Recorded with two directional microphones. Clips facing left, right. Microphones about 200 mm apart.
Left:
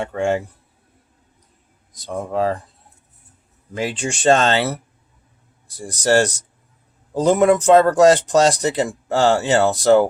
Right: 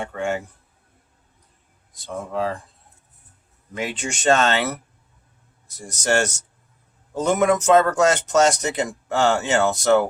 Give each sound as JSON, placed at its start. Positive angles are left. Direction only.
{"t": 0.2, "sound": "speech", "side_deg": 30}
{"t": 1.9, "sound": "speech", "side_deg": 40}
{"t": 3.8, "sound": "speech", "side_deg": 30}